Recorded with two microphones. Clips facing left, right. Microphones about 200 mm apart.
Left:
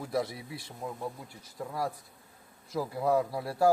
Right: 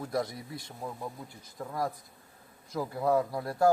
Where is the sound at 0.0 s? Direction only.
5° left (ahead or behind).